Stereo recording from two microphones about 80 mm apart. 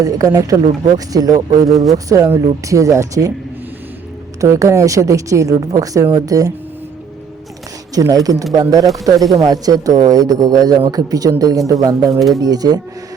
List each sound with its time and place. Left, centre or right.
0.0 s a man's voice: right
4.4 s a man's voice: right
7.9 s a man's voice: right